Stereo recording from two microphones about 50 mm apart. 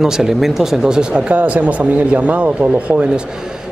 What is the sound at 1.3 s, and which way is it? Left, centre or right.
Speech, right.